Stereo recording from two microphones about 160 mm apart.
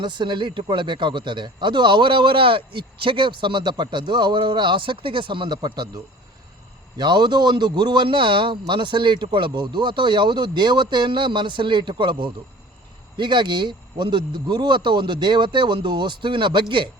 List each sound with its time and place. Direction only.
0.0 s speech: 30° right (ahead or behind)